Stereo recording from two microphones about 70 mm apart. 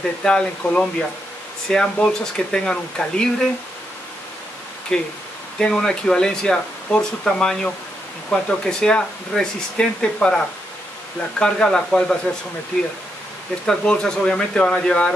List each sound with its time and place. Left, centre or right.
0.2 s speech: centre
4.9 s speech: centre
13.7 s speech: centre